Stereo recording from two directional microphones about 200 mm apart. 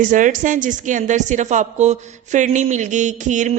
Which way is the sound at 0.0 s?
40° right (ahead or behind).